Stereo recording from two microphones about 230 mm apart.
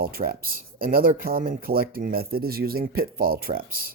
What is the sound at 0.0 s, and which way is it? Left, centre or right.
Speech, right.